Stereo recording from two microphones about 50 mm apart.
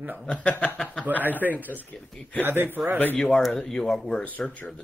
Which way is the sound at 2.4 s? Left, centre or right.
Right.